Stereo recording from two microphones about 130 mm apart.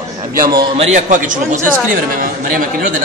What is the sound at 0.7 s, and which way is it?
Speech, 65° right (ahead or behind).